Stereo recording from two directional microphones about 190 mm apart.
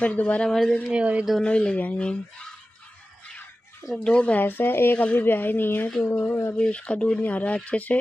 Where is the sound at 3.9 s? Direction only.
5° left (ahead or behind).